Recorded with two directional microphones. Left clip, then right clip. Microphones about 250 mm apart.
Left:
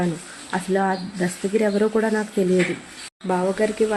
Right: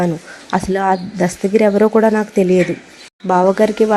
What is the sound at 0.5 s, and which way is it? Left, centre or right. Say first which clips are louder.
Speech: right 7 dB; right.